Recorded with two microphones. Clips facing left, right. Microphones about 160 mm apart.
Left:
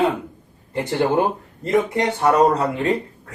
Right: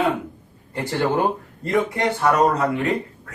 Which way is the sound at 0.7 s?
20° left (ahead or behind).